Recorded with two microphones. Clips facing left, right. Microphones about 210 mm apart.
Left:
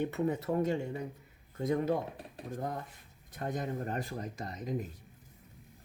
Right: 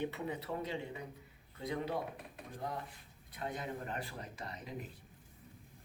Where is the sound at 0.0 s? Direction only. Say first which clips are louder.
Left 7 dB; 45° left (ahead or behind).